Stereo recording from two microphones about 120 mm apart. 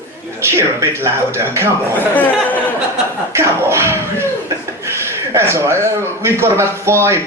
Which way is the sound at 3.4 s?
20° right (ahead or behind).